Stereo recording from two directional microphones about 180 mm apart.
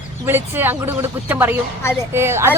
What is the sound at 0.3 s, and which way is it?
Speech, 10° right (ahead or behind).